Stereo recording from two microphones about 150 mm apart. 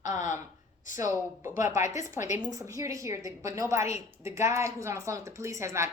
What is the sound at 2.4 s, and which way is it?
A woman's voice, 20° right (ahead or behind).